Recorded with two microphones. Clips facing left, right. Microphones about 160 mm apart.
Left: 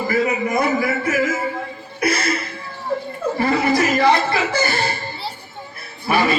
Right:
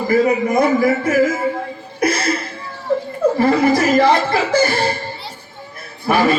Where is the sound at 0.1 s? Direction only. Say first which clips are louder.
Right 6 dB; 45° right (ahead or behind).